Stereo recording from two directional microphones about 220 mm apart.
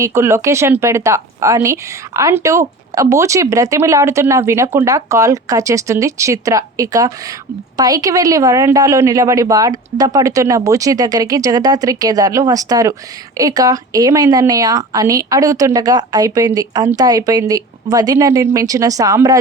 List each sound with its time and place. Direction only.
0.0 s a woman's voice: 15° right (ahead or behind)